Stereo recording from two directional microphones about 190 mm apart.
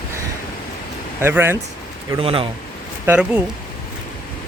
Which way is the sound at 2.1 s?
30° right (ahead or behind).